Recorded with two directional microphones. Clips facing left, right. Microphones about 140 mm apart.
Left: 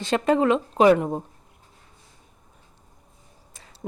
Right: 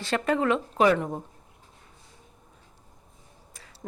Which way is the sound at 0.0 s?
20° left (ahead or behind).